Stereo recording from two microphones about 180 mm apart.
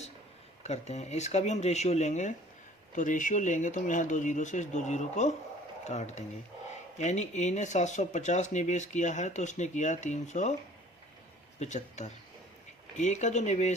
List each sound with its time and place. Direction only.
0.6 s speech: 40° left (ahead or behind)
11.6 s speech: 40° left (ahead or behind)